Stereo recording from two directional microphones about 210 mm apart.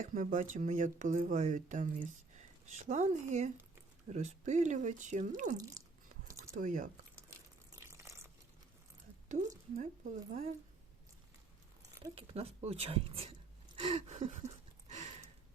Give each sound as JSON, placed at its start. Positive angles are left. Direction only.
{"t": 0.0, "sound": "speech", "side_deg": -40}
{"t": 5.5, "sound": "speech", "side_deg": -15}
{"t": 6.5, "sound": "speech", "side_deg": -40}
{"t": 7.7, "sound": "a sound", "side_deg": -15}
{"t": 9.3, "sound": "speech", "side_deg": -35}
{"t": 12.0, "sound": "speech", "side_deg": -25}
{"t": 13.7, "sound": "a sound", "side_deg": -25}